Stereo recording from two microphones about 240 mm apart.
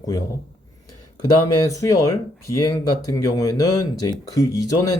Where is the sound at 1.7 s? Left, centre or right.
Centre.